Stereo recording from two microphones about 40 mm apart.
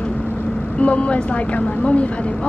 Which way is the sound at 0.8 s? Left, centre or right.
Left.